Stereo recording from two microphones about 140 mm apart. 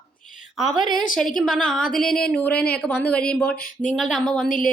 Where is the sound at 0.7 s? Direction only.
35° right (ahead or behind).